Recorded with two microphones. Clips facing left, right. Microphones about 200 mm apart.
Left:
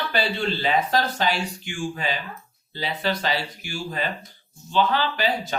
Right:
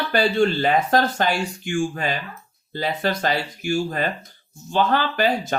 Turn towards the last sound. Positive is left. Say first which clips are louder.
# right 4 dB
turn(degrees=-50)  # may be behind; listen again after turning